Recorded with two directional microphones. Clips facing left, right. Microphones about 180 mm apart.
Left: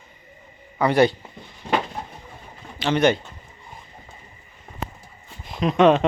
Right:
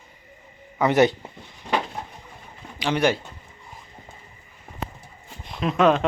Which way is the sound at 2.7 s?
10° right (ahead or behind).